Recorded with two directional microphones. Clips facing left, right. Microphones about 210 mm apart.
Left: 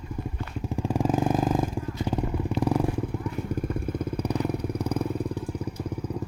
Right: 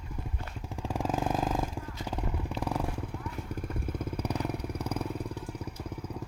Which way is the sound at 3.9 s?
5° right (ahead or behind).